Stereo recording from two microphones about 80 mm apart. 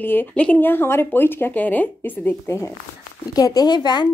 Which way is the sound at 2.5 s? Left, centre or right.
Left.